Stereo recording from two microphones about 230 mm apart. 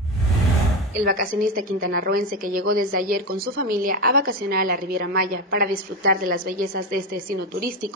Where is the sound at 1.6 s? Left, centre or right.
Right.